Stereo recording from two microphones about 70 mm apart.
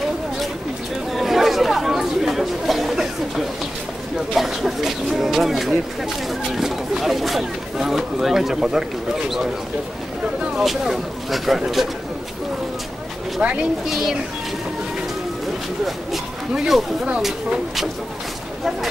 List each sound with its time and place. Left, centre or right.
1.1 s chatter: centre
4.3 s a sound: centre
10.6 s speech: centre
13.4 s speech: centre
13.8 s speech: centre
16.1 s speech: centre
17.0 s speech: centre